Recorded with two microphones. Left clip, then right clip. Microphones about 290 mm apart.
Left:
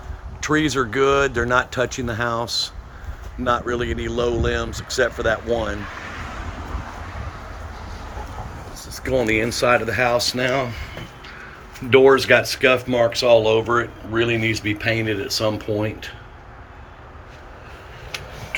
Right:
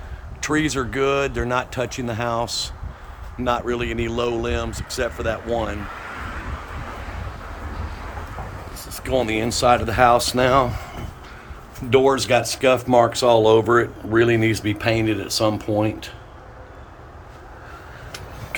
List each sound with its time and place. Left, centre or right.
0.4 s speech: centre
9.2 s speech: right
9.5 s speech: centre
11.9 s speech: centre